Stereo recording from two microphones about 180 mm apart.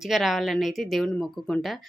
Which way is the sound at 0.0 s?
Centre (ahead or behind).